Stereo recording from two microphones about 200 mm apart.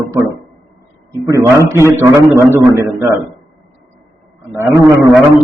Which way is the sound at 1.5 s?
15° right (ahead or behind).